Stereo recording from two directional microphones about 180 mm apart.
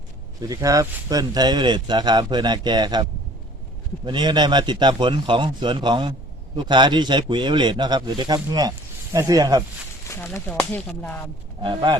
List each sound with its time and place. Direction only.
0.4 s speech: 20° right (ahead or behind)
10.1 s speech: 10° left (ahead or behind)
11.6 s speech: 25° right (ahead or behind)